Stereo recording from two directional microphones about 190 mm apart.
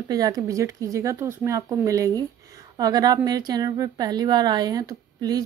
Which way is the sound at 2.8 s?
20° right (ahead or behind).